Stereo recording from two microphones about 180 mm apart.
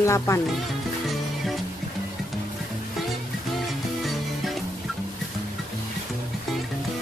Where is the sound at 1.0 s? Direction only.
Centre (ahead or behind).